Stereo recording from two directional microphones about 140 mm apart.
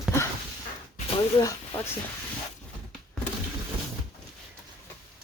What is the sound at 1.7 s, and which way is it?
Speech, 45° left (ahead or behind).